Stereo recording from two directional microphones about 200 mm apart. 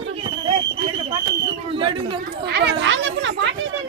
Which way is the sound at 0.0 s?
25° right (ahead or behind).